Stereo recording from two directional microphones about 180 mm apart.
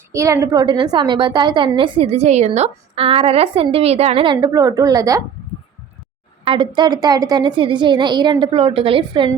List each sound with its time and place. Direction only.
0.1 s a woman's voice: 15° right (ahead or behind)
6.4 s a woman's voice: 30° right (ahead or behind)